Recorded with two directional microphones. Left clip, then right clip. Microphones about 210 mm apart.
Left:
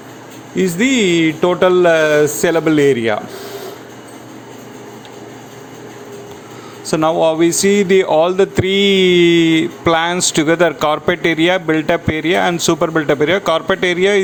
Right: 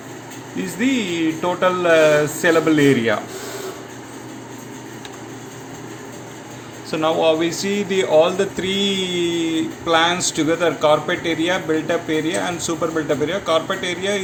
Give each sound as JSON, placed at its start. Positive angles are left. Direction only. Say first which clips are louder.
{"t": 0.5, "sound": "speech", "louder": "left 7 dB", "side_deg": 45}
{"t": 6.8, "sound": "speech", "louder": "left 4 dB", "side_deg": 50}